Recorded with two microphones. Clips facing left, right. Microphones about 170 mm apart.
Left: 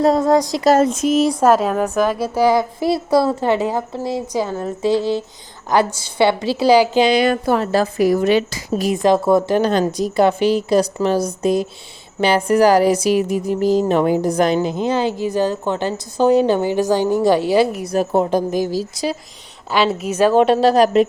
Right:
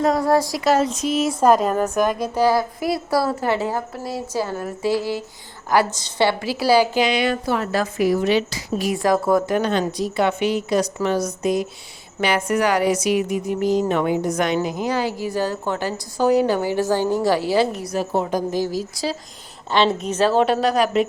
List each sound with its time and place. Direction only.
0.0 s a woman's voice: 25° left (ahead or behind)
0.6 s speech: 45° left (ahead or behind)
1.4 s a woman's voice: 5° left (ahead or behind); by 5.2 s 25° left (ahead or behind)
5.9 s a woman's voice: 10° left (ahead or behind)
6.4 s a woman's voice: 25° left (ahead or behind)
7.0 s a woman's voice: 35° left (ahead or behind)
7.6 s speech: 30° left (ahead or behind); by 8.9 s 45° left (ahead or behind)
8.9 s a woman's voice: 20° left (ahead or behind)
17.9 s speech: 50° left (ahead or behind)
19.0 s a woman's voice: 20° left (ahead or behind)
19.7 s a woman's voice: 5° left (ahead or behind); by 21.1 s 35° left (ahead or behind)